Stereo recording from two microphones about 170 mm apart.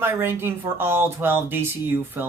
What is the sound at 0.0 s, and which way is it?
A woman's voice, 15° right (ahead or behind).